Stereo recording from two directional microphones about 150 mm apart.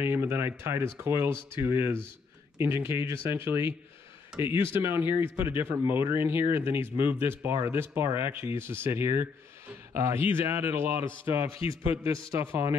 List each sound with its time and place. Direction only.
0.0 s speech: 15° right (ahead or behind)
11.4 s speech: 40° left (ahead or behind)
11.9 s a man's voice: 20° right (ahead or behind)